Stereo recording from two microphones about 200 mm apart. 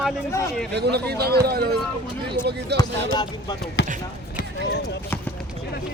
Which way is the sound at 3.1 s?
20° left (ahead or behind).